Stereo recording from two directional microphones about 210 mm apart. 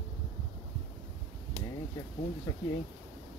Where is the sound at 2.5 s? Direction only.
15° left (ahead or behind).